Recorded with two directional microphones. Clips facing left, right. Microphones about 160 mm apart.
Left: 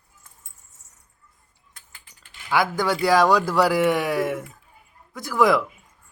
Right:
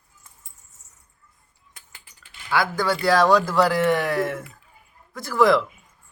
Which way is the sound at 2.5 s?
15° left (ahead or behind).